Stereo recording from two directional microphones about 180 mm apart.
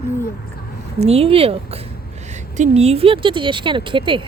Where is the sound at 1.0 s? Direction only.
35° right (ahead or behind).